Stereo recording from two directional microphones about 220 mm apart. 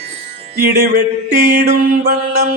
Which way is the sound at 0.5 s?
45° right (ahead or behind).